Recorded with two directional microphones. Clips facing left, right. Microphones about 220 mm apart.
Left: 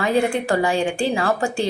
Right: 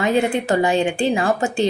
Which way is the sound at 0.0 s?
20° right (ahead or behind).